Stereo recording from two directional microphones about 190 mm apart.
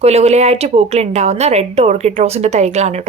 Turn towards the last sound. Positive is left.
turn(degrees=-35)  # may be behind; listen again after turning